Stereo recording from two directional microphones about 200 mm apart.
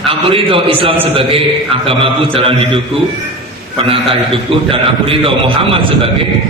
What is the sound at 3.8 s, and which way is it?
A man's voice, 25° right (ahead or behind).